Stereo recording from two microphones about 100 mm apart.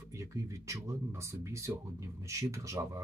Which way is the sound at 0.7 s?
30° right (ahead or behind).